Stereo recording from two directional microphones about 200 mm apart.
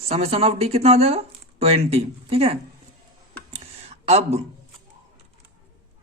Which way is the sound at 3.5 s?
30° right (ahead or behind).